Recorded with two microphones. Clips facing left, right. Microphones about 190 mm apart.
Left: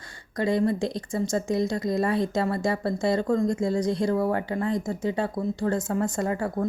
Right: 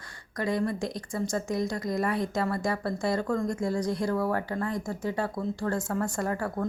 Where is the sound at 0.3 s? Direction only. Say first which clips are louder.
Left 5 dB; 25° left (ahead or behind).